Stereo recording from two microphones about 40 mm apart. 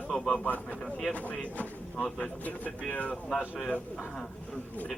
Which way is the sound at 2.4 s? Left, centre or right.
Left.